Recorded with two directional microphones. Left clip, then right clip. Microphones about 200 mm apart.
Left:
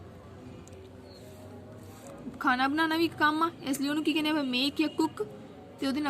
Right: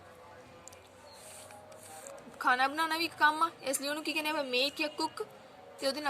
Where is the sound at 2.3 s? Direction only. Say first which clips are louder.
Left 2 dB; 15° right (ahead or behind).